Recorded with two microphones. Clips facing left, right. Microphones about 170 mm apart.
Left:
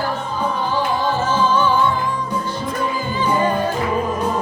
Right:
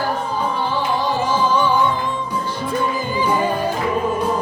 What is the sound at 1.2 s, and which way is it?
Music, 15° right (ahead or behind).